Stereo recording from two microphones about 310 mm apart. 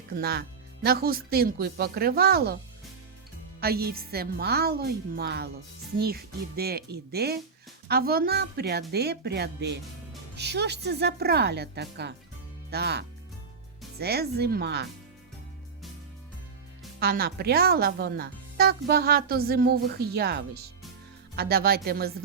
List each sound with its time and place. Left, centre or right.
0.2 s speech: right
3.6 s speech: right
17.0 s speech: right